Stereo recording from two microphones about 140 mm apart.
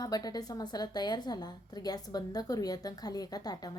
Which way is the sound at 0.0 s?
30° left (ahead or behind).